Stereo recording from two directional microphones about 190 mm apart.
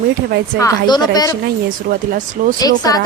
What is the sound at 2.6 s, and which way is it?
Speech, 20° left (ahead or behind).